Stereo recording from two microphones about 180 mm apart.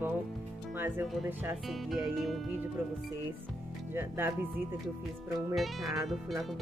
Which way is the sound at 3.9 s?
15° right (ahead or behind).